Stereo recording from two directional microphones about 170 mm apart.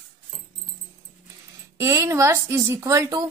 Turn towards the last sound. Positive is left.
turn(degrees=-20)  # may be behind; listen again after turning